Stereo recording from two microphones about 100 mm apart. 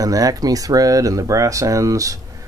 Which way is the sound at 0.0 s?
35° right (ahead or behind).